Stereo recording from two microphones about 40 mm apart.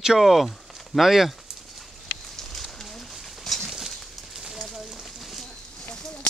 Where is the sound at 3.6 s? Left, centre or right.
Centre.